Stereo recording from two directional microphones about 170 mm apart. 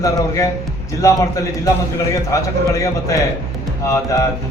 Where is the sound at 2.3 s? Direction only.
20° left (ahead or behind).